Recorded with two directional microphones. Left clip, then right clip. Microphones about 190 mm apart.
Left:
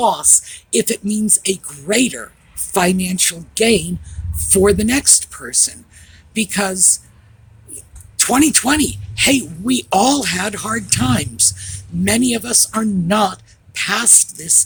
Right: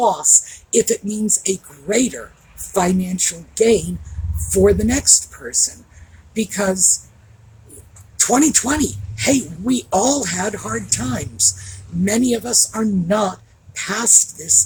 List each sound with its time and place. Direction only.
0.0 s speech: 45° left (ahead or behind)
8.1 s speech: 45° left (ahead or behind)